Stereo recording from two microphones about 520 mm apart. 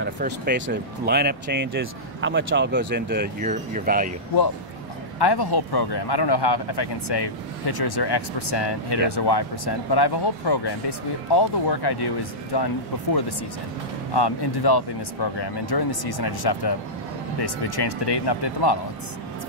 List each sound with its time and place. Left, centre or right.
0.0 s speech: centre
5.2 s speech: left
14.1 s speech: left